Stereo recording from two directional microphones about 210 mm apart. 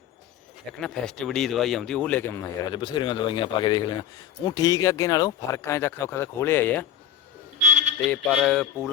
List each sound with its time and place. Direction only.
0.7 s speech: 5° left (ahead or behind)
7.7 s a sound: 35° right (ahead or behind)
8.1 s speech: 5° left (ahead or behind)